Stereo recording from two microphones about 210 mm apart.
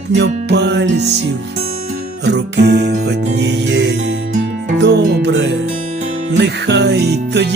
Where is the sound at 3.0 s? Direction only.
55° right (ahead or behind).